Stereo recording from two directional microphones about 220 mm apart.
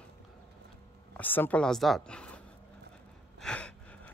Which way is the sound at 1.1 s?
10° left (ahead or behind).